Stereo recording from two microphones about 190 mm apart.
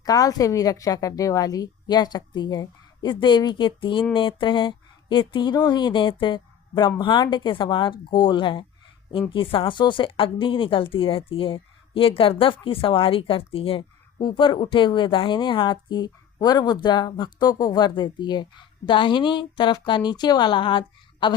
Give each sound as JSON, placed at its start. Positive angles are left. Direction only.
{"t": 0.0, "sound": "speech", "side_deg": 20}